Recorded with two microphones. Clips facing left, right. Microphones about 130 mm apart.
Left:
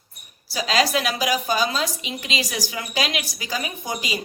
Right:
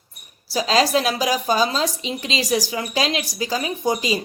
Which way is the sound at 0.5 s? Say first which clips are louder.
Right 3 dB; 35° right (ahead or behind).